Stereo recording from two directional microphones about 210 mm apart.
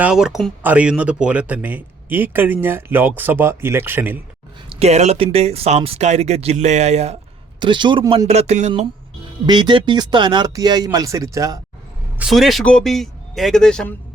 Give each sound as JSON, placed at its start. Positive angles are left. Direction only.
{"t": 0.0, "sound": "speech", "side_deg": -5}
{"t": 4.7, "sound": "speech", "side_deg": -30}
{"t": 8.3, "sound": "speech", "side_deg": -30}
{"t": 9.5, "sound": "speech", "side_deg": -20}
{"t": 12.2, "sound": "a man's voice", "side_deg": 0}